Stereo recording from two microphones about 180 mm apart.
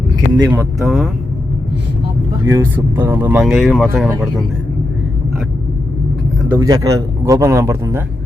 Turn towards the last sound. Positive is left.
turn(degrees=-15)  # may be behind; listen again after turning